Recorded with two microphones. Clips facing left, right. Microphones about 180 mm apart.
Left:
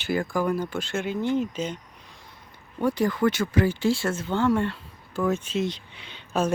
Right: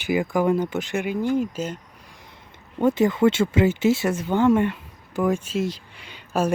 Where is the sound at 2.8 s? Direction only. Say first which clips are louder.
Right 5 dB; 20° right (ahead or behind).